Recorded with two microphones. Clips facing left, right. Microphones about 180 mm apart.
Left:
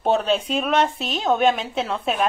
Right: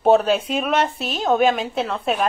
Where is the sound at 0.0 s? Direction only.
5° right (ahead or behind).